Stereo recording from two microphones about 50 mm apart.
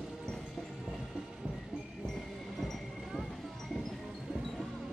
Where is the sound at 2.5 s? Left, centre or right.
Centre.